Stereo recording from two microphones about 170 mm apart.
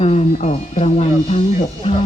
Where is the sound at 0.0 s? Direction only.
40° left (ahead or behind).